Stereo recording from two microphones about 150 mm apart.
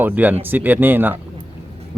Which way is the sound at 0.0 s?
10° right (ahead or behind).